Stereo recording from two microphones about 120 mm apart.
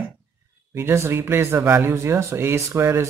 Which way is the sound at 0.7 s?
20° right (ahead or behind).